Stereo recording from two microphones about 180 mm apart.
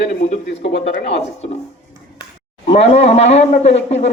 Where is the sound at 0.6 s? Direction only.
75° left (ahead or behind).